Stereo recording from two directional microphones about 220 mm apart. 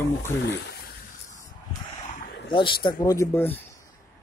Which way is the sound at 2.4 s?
20° left (ahead or behind).